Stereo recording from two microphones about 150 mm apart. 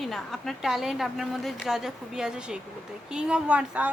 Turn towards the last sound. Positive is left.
turn(degrees=-10)  # may be behind; listen again after turning